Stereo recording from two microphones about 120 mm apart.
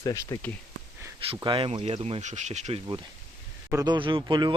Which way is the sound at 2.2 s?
80° right.